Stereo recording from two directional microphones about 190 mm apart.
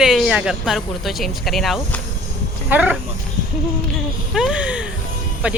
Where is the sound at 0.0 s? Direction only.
Centre (ahead or behind).